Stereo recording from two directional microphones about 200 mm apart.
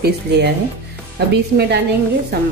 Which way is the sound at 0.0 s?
55° right (ahead or behind).